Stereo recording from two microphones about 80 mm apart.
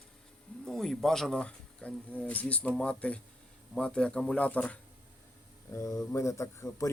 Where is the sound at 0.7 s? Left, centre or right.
Centre.